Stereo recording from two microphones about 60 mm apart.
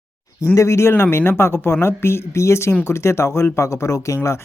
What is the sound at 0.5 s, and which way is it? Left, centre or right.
Speech, left.